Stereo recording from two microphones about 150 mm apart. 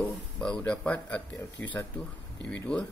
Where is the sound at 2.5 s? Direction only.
5° left (ahead or behind).